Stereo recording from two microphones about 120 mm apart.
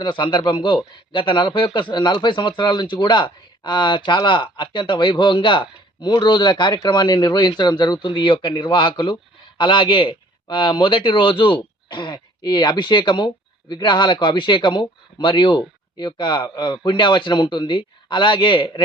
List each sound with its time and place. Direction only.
0.0 s a man's voice: 40° left (ahead or behind)